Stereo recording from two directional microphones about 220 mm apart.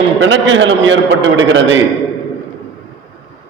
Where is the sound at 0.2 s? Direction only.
60° right (ahead or behind).